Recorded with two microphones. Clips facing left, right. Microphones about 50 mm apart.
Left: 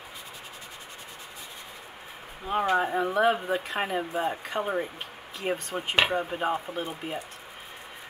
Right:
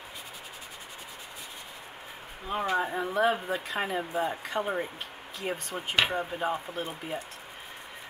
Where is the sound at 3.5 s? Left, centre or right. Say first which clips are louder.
Left 2 dB; centre.